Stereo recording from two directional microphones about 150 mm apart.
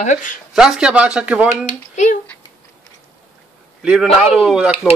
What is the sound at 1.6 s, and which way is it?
Speech, 55° left (ahead or behind).